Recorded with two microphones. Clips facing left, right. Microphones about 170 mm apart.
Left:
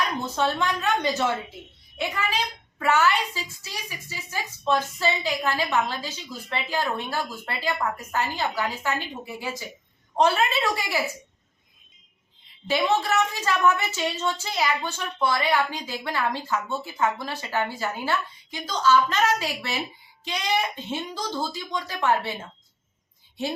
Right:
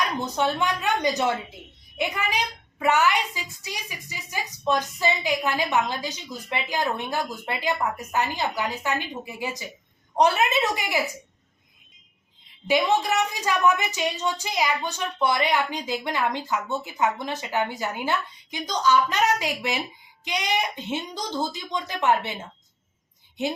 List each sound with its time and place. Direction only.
0.3 s a woman's voice: 15° right (ahead or behind)
12.6 s a woman's voice: 15° right (ahead or behind)